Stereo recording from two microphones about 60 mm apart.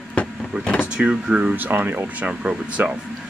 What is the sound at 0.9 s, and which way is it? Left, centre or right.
Speech, centre.